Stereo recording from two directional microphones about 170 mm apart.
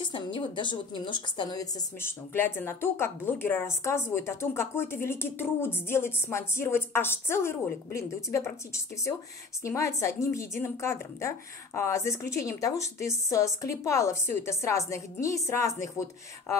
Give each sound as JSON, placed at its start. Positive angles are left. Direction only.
{"t": 0.0, "sound": "a woman's voice", "side_deg": 30}
{"t": 9.6, "sound": "a woman's voice", "side_deg": 15}